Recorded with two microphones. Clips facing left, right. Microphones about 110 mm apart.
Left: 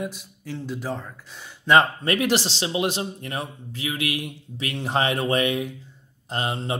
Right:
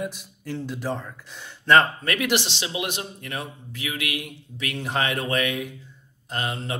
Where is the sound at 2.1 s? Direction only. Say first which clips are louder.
Left 2 dB; 30° left (ahead or behind).